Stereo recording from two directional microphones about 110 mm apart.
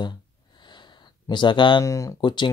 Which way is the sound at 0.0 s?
40° left (ahead or behind).